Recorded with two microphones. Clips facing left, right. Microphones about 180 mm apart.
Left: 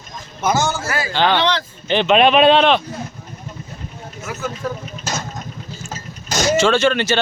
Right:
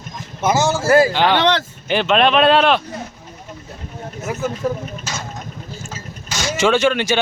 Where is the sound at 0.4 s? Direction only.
25° right (ahead or behind).